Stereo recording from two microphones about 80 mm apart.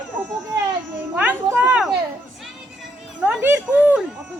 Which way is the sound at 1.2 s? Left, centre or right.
Right.